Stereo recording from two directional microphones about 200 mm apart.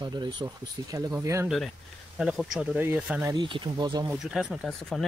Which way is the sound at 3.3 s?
25° right (ahead or behind).